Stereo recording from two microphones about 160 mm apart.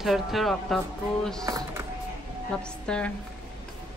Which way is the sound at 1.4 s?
20° right (ahead or behind).